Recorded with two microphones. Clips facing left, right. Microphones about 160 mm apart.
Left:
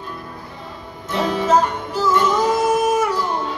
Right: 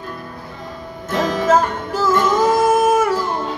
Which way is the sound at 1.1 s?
45° right (ahead or behind).